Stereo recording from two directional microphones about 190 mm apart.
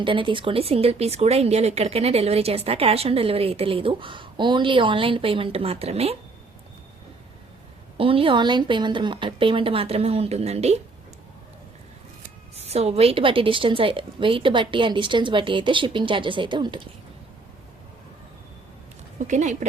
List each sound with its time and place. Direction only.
0.0 s speech: 25° right (ahead or behind)
7.9 s a woman's voice: 30° right (ahead or behind)
12.5 s a woman's voice: 35° right (ahead or behind)
19.3 s speech: 40° right (ahead or behind)